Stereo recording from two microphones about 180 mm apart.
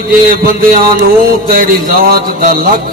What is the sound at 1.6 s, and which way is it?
Speech, 50° right (ahead or behind).